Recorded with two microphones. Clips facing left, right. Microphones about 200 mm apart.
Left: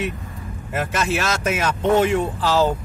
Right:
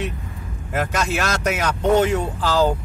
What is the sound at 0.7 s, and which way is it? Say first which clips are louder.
Speech: even; 5° left (ahead or behind).